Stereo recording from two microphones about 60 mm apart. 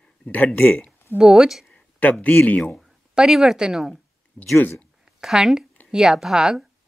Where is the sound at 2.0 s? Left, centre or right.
Left.